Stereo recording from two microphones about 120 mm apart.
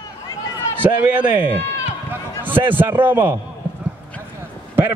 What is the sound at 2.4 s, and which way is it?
Speech, 15° right (ahead or behind).